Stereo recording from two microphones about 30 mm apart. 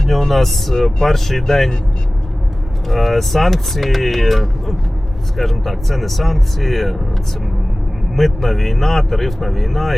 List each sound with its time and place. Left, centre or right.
0.1 s speech: centre
2.8 s speech: centre
8.1 s speech: centre